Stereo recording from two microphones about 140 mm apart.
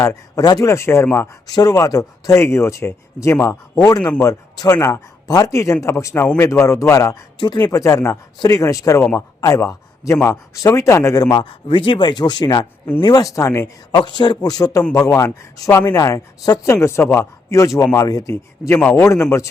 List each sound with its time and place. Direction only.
0.0 s speech: 25° left (ahead or behind)
7.3 s speech: 35° left (ahead or behind)
13.9 s a man's voice: 35° left (ahead or behind)